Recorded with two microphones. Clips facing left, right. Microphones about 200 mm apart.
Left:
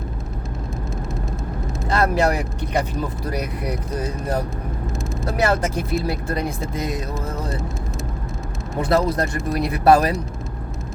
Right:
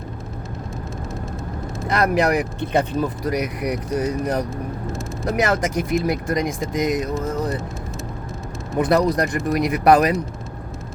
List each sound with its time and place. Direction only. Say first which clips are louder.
1.9 s speech: right 1 dB; 20° right (ahead or behind)
8.8 s speech: right 2 dB; 20° right (ahead or behind)